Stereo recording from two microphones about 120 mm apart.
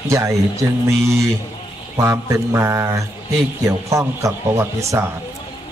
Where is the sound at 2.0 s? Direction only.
20° right (ahead or behind).